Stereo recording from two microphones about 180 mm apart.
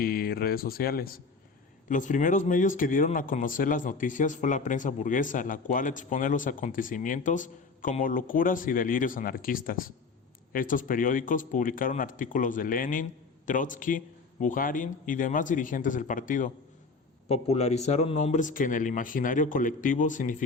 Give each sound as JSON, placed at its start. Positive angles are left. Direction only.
{"t": 0.0, "sound": "speech", "side_deg": 55}
{"t": 1.9, "sound": "speech", "side_deg": 45}
{"t": 17.2, "sound": "speech", "side_deg": 35}